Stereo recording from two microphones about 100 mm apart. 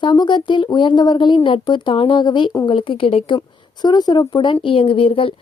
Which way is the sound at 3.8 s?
45° left (ahead or behind).